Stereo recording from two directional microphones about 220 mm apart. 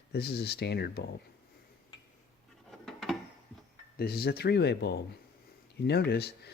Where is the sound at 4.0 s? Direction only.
45° left (ahead or behind).